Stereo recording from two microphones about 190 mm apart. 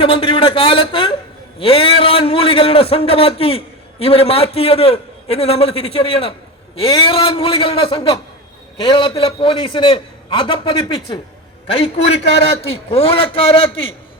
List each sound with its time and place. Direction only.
0.0 s a man's voice: 25° left (ahead or behind)